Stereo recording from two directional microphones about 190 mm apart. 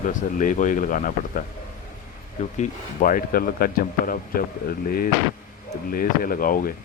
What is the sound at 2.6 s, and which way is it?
Speech, 45° left (ahead or behind).